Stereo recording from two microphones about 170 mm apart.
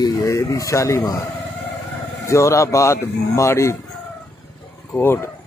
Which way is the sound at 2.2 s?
15° left (ahead or behind).